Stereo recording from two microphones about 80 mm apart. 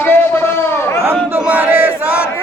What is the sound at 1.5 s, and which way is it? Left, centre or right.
Battle cry, right.